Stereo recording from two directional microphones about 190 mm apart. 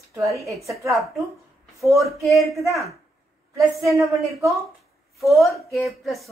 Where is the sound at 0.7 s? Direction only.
Centre (ahead or behind).